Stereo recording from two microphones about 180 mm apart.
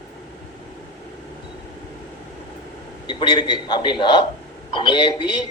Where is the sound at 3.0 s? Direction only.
25° left (ahead or behind).